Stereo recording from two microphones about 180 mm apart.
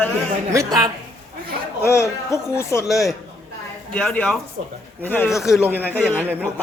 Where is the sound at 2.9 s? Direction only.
Centre (ahead or behind).